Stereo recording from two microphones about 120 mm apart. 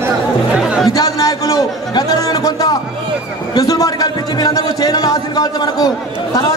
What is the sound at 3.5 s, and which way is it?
A man's voice, 30° left (ahead or behind).